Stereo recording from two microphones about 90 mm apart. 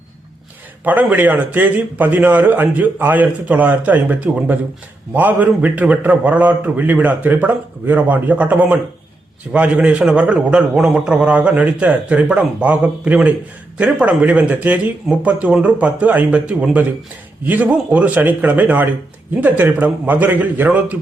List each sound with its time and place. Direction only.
0.9 s a man's voice: 20° right (ahead or behind)